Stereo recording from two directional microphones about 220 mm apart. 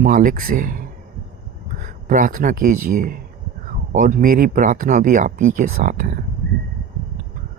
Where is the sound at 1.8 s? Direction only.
35° right (ahead or behind).